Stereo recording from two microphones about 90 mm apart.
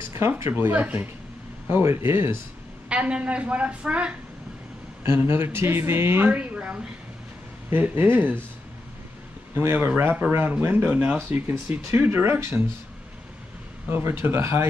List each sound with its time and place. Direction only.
0.4 s speech: 25° right (ahead or behind)
2.9 s a woman's voice: 15° right (ahead or behind)
5.0 s speech: 25° right (ahead or behind)
9.6 s speech: 25° right (ahead or behind)
13.8 s speech: 25° right (ahead or behind)